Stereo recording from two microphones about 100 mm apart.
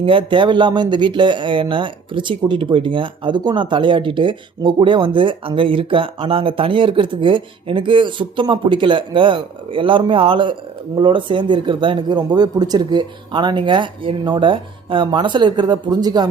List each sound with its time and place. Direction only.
0.0 s speech: 60° right (ahead or behind); by 16.3 s 40° right (ahead or behind)